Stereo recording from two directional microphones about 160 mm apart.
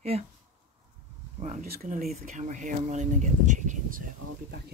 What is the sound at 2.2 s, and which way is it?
Speech, 50° right (ahead or behind).